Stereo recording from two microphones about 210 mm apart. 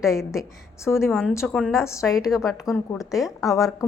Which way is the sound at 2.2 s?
Centre (ahead or behind).